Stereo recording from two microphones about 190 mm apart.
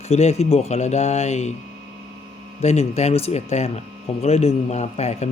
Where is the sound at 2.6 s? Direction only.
35° left (ahead or behind).